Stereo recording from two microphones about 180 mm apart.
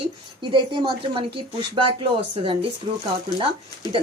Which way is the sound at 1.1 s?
30° right (ahead or behind).